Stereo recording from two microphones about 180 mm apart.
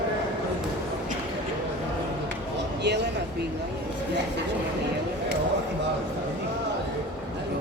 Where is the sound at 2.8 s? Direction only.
70° right (ahead or behind).